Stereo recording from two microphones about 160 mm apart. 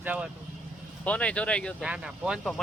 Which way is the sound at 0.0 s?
10° right (ahead or behind).